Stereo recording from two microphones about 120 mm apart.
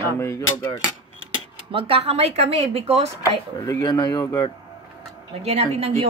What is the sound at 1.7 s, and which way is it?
Speech, 50° right (ahead or behind).